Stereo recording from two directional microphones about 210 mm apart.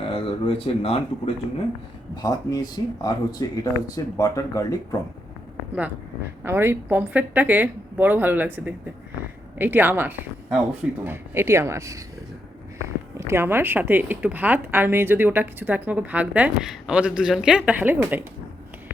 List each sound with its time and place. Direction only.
0.1 s speech: 25° left (ahead or behind)
6.4 s a woman's voice: 10° right (ahead or behind)
9.6 s a woman's voice: 10° right (ahead or behind)
13.1 s a woman's voice: 10° right (ahead or behind)